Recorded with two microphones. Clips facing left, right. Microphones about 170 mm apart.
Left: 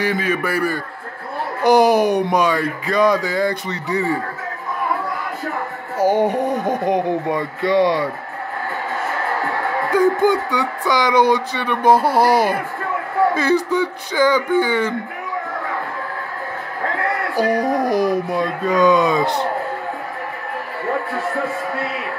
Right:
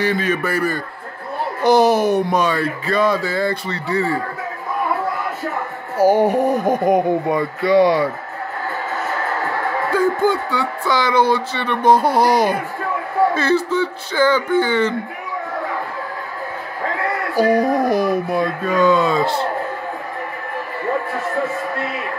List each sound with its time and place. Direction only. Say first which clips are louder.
0.0 s speech: right 1 dB; 10° left (ahead or behind)
5.9 s speech: right 2 dB; 10° right (ahead or behind)
9.8 s speech: left 2 dB; 15° left (ahead or behind)
17.9 s speech: even; 15° left (ahead or behind)